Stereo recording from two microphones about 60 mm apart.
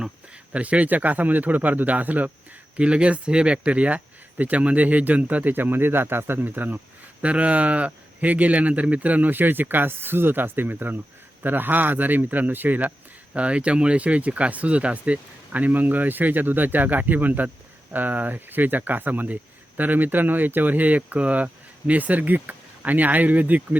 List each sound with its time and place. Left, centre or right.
0.5 s speech: right
13.3 s speech: right